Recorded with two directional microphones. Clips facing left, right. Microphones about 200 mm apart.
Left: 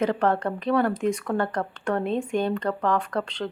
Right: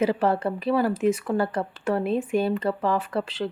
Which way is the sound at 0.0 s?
5° right (ahead or behind).